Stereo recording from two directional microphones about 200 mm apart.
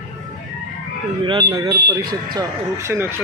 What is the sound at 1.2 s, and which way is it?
Speech, 20° right (ahead or behind).